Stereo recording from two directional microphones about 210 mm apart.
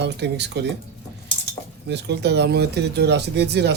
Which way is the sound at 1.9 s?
55° right (ahead or behind).